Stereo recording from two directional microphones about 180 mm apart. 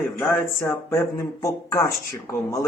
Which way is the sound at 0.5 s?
15° left (ahead or behind).